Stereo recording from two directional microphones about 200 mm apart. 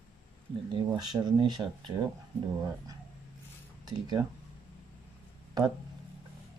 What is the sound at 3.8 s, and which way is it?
Speech, 20° right (ahead or behind).